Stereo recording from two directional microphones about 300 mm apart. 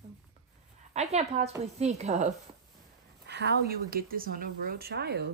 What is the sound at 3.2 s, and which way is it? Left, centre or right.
A woman's voice, right.